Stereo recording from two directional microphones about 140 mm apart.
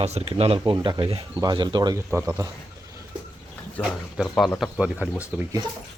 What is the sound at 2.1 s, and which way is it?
Speech, 20° right (ahead or behind).